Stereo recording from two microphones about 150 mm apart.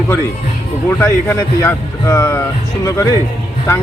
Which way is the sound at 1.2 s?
15° left (ahead or behind).